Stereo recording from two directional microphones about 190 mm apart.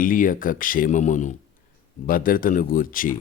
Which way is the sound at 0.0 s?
45° left (ahead or behind).